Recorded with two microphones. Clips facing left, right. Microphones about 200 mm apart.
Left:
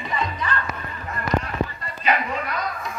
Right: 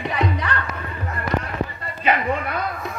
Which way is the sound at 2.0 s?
55° right (ahead or behind).